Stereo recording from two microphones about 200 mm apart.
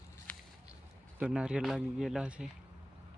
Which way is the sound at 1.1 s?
5° right (ahead or behind).